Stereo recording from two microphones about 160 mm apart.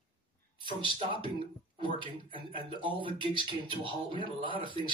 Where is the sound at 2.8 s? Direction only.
30° right (ahead or behind).